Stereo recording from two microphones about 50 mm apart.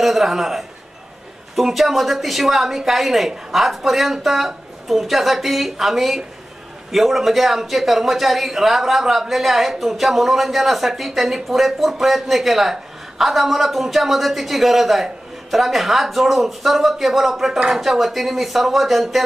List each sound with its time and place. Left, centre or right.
0.0 s a man's voice: centre